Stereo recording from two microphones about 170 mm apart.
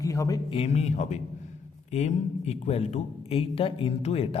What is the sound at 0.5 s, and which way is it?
A man's voice, 35° left (ahead or behind).